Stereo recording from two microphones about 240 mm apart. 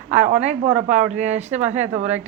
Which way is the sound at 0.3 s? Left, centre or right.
Right.